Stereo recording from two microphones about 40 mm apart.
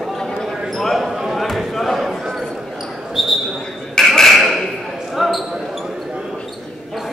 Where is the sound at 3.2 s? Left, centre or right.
Centre.